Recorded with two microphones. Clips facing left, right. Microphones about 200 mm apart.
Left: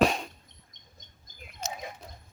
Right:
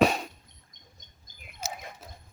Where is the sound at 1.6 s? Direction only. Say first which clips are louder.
Left 1 dB; 5° right (ahead or behind).